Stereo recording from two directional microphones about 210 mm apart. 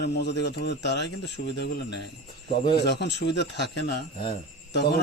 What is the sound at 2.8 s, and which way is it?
Speech, 55° left (ahead or behind).